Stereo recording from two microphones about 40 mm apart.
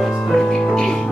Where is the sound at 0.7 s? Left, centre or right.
Centre.